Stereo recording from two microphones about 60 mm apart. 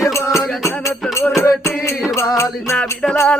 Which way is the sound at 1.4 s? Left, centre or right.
Left.